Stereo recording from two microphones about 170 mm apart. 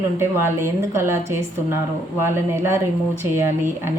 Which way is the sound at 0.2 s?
15° right (ahead or behind).